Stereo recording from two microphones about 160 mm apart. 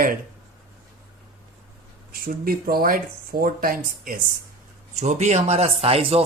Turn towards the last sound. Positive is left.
turn(degrees=-35)  # may be behind; listen again after turning